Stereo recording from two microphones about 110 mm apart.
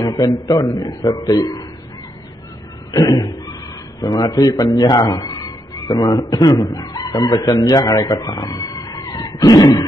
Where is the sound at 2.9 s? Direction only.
35° left (ahead or behind).